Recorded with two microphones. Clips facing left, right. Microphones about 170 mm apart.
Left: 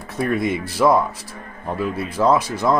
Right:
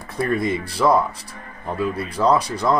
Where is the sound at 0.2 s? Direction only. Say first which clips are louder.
Left 1 dB; 5° left (ahead or behind).